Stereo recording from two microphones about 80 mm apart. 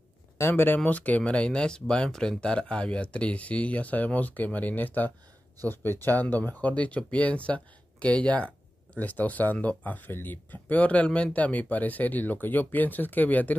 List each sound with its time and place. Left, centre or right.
0.4 s speech: left